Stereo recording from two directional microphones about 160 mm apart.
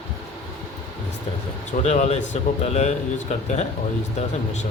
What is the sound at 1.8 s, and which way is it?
Speech, 45° left (ahead or behind).